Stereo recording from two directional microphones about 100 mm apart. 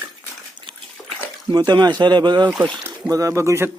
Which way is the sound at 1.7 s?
45° right (ahead or behind).